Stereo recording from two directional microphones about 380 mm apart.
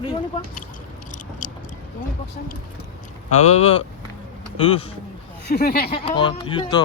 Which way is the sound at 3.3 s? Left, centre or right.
Centre.